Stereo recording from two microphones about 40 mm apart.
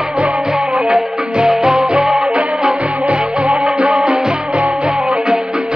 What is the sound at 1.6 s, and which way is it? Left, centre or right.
Music, centre.